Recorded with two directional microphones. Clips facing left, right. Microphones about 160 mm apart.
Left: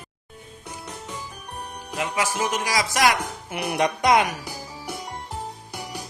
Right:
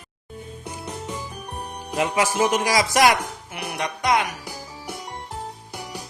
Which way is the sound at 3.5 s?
15° left (ahead or behind).